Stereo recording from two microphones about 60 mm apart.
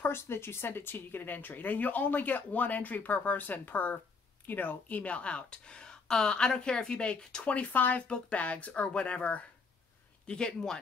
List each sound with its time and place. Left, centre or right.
0.0 s speech: left; by 10.8 s centre